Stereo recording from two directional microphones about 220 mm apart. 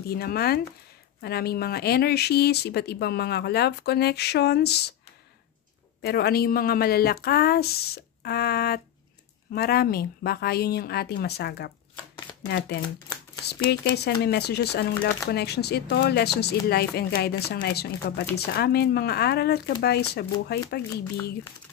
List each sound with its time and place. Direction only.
0.1 s speech: 45° left (ahead or behind)
6.0 s speech: 45° left (ahead or behind)